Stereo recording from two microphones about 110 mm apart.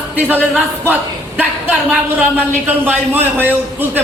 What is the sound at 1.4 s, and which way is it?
A man's voice, 15° right (ahead or behind).